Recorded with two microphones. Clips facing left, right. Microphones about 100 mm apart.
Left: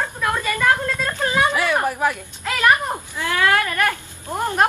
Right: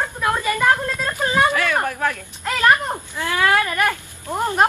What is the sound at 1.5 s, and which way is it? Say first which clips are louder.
A woman's voice: left 1 dB; 15° left (ahead or behind).